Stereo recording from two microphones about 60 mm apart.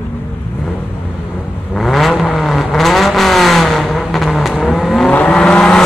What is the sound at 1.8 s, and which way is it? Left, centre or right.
Vehicle, centre.